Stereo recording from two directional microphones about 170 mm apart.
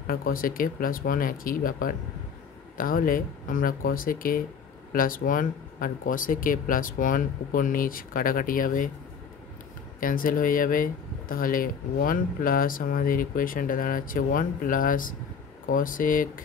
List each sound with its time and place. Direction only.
0.0 s speech: 55° left (ahead or behind)
9.9 s speech: 55° left (ahead or behind)